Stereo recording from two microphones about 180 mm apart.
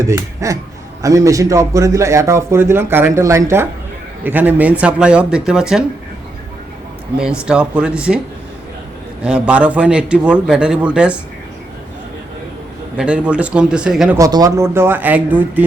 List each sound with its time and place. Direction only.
0.0 s a man's voice: 20° right (ahead or behind)
7.2 s a man's voice: 5° right (ahead or behind)
9.2 s a man's voice: 5° right (ahead or behind)
13.0 s a man's voice: 5° right (ahead or behind)
14.2 s a man's voice: 20° right (ahead or behind)